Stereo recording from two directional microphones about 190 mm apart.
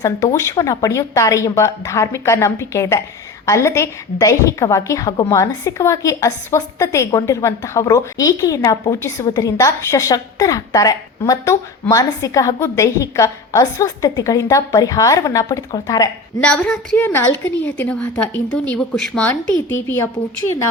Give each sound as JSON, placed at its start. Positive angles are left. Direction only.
{"t": 0.0, "sound": "a woman's voice", "side_deg": 15}
{"t": 16.4, "sound": "a woman's voice", "side_deg": 5}